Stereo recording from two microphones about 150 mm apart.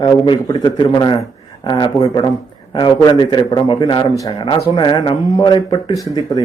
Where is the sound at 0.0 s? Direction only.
25° left (ahead or behind).